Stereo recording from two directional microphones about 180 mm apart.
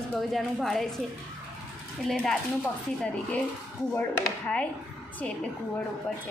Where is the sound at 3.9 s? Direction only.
10° left (ahead or behind).